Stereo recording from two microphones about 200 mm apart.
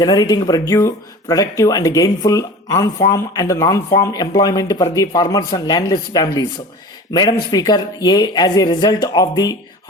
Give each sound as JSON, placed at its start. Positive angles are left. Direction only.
{"t": 0.0, "sound": "speech", "side_deg": 20}